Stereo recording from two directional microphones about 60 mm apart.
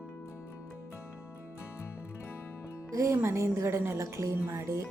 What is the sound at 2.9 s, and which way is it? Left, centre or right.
A woman's voice, right.